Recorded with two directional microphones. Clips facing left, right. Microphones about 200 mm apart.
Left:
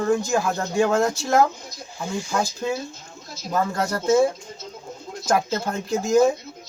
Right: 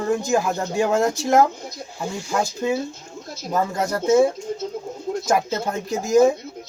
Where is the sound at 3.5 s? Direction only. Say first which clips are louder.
Right 1 dB; 20° right (ahead or behind).